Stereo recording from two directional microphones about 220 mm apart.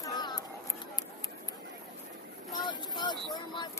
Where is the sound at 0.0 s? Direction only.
15° left (ahead or behind).